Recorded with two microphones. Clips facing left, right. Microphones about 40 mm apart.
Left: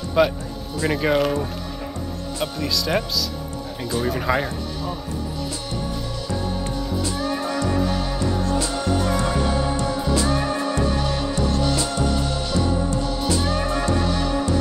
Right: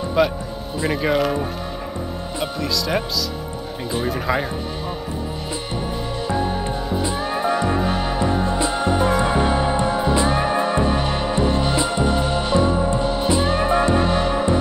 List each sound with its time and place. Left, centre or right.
0.2 s speech: centre
2.4 s speech: centre
4.0 s speech: centre
6.2 s music: right